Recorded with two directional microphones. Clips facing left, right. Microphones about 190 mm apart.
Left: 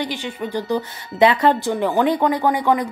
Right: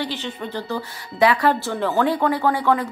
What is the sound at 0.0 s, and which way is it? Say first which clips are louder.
A woman's voice: left 2 dB; 15° left (ahead or behind).